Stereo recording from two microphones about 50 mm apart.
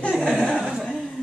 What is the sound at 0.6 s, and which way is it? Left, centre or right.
Speech, centre.